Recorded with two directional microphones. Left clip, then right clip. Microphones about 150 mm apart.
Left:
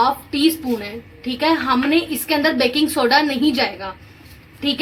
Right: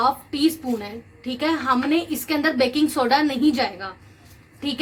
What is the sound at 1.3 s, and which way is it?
A woman's voice, 40° right (ahead or behind).